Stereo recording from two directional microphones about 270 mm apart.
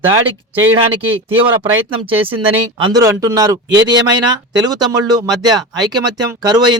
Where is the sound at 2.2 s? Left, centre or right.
Centre.